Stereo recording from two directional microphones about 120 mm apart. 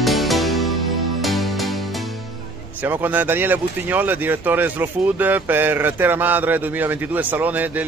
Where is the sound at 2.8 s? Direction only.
15° right (ahead or behind).